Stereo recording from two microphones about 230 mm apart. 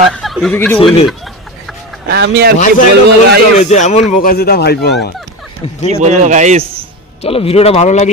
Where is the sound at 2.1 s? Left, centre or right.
Right.